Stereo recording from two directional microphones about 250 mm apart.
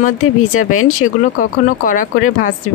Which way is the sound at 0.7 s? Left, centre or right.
Left.